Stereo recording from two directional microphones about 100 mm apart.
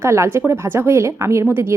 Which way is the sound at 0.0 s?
25° right (ahead or behind).